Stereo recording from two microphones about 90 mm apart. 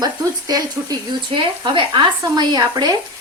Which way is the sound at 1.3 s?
65° right (ahead or behind).